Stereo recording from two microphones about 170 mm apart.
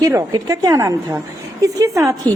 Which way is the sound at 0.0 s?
20° right (ahead or behind).